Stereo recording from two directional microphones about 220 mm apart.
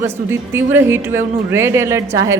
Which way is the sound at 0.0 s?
10° right (ahead or behind).